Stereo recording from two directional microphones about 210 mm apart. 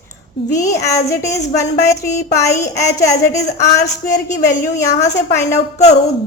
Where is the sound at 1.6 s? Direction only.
15° left (ahead or behind).